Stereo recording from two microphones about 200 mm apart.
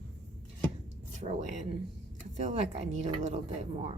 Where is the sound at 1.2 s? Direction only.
35° right (ahead or behind).